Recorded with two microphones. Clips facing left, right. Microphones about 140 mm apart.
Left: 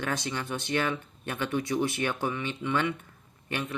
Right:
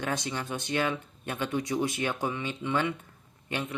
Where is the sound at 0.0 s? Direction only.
20° right (ahead or behind).